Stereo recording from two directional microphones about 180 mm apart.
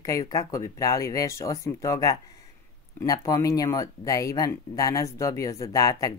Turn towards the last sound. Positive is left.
turn(degrees=20)  # may be behind; listen again after turning